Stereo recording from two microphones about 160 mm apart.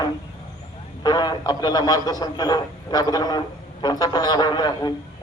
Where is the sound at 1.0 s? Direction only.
25° left (ahead or behind).